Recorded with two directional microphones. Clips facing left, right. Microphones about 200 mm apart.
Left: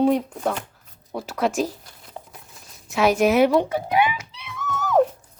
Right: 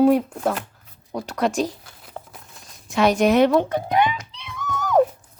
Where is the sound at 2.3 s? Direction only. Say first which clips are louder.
Right 1 dB; centre (ahead or behind).